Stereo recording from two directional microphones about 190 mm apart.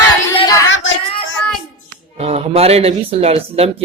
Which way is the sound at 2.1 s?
30° right (ahead or behind).